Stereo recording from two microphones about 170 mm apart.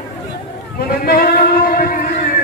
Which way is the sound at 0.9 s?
65° left (ahead or behind).